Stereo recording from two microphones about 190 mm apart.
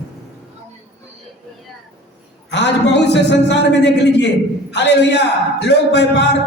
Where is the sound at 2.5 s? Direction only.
65° left (ahead or behind).